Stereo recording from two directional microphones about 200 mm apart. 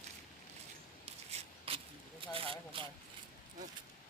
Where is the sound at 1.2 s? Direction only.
30° right (ahead or behind).